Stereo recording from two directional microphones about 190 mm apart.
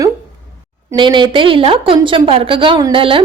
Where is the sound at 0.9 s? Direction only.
25° right (ahead or behind).